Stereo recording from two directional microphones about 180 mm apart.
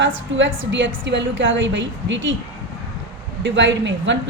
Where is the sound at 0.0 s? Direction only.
90° right.